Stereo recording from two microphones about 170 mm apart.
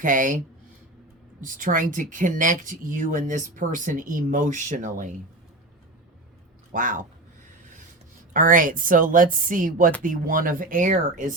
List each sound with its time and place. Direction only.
0.0 s speech: 50° right (ahead or behind)
6.7 s speech: 50° right (ahead or behind)
7.4 s filing: 50° right (ahead or behind)
8.3 s speech: 55° right (ahead or behind)